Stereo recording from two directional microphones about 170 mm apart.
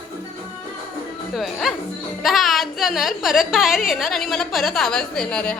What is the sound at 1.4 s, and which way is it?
A woman's voice, centre (ahead or behind).